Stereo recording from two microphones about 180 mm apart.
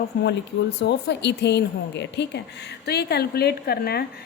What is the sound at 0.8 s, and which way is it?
A woman's voice, 70° left (ahead or behind).